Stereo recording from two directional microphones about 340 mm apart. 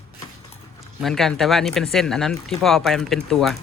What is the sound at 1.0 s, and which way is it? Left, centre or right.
Speech, centre.